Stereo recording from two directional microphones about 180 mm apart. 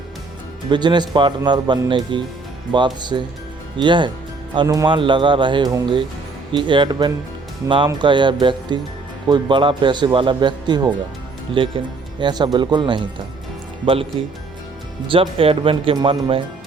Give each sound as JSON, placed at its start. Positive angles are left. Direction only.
{"t": 0.7, "sound": "a man's voice", "side_deg": -25}
{"t": 12.2, "sound": "a man's voice", "side_deg": -25}